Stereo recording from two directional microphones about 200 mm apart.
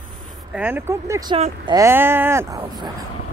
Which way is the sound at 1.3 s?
25° right (ahead or behind).